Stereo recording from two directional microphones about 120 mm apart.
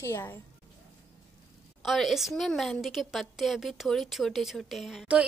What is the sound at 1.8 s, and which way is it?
A woman's voice, centre (ahead or behind).